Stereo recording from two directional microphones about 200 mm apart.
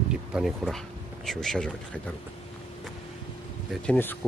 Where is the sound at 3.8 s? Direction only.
10° left (ahead or behind).